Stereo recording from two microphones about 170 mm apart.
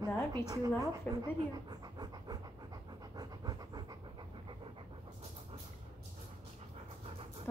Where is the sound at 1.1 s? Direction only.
25° right (ahead or behind).